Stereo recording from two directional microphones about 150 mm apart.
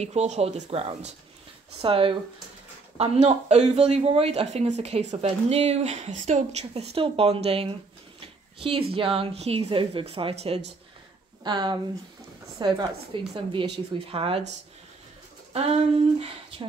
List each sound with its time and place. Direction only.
0.0 s speech: 45° right (ahead or behind)
8.9 s speech: 35° right (ahead or behind)
11.4 s a woman's voice: 30° right (ahead or behind)
15.5 s speech: 45° right (ahead or behind)